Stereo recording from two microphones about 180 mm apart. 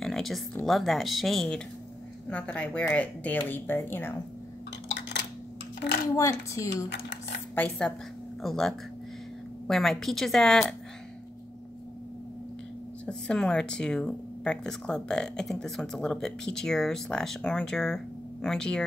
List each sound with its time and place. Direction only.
0.0 s a sound: centre (ahead or behind)
0.7 s speech: centre (ahead or behind)
6.1 s speech: 15° left (ahead or behind)
13.0 s speech: 5° left (ahead or behind)